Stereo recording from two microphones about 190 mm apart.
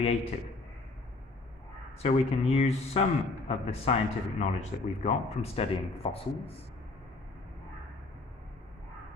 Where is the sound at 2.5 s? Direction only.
35° left (ahead or behind).